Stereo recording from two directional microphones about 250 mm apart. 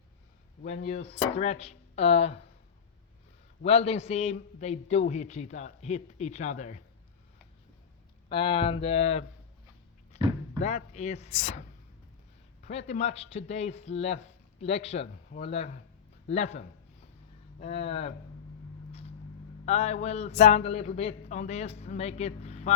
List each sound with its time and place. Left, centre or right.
0.6 s a man's voice: left
3.6 s a man's voice: left
8.3 s a man's voice: centre
10.1 s a sound: left
10.6 s a man's voice: left
12.6 s a man's voice: left
18.9 s vehicle: left
19.6 s a man's voice: left